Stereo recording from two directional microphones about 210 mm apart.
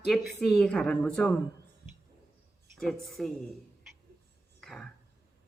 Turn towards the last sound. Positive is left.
turn(degrees=0)  # may be behind; listen again after turning